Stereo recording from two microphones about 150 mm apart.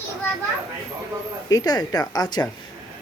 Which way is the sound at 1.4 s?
25° left (ahead or behind).